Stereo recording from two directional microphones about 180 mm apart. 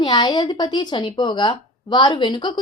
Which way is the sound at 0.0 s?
25° left (ahead or behind).